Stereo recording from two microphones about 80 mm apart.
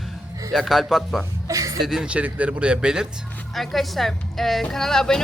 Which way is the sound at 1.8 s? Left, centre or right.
Centre.